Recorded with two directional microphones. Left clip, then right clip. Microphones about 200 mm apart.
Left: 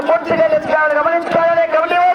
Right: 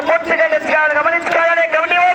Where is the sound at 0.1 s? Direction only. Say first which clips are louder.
Left 1 dB; 20° right (ahead or behind).